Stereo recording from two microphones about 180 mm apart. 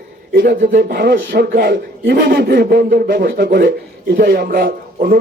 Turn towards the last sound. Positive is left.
turn(degrees=-55)  # may be behind; listen again after turning